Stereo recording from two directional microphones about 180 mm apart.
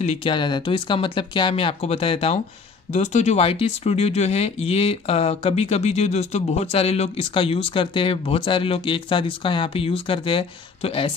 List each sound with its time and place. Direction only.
0.0 s speech: 30° left (ahead or behind)